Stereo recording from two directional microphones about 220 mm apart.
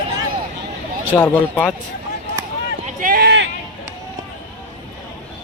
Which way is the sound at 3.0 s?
40° right (ahead or behind).